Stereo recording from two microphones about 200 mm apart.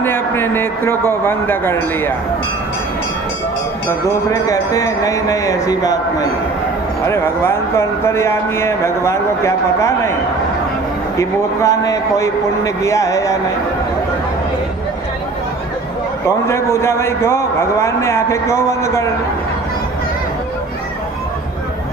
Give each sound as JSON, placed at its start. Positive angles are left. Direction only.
{"t": 0.0, "sound": "speech", "side_deg": 10}
{"t": 4.1, "sound": "speech", "side_deg": 15}
{"t": 11.2, "sound": "speech", "side_deg": 15}
{"t": 16.5, "sound": "speech", "side_deg": 15}